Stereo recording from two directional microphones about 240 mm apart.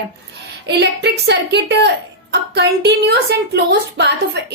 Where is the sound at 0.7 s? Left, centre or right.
Right.